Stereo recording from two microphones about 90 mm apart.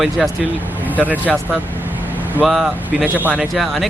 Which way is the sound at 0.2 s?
5° right (ahead or behind).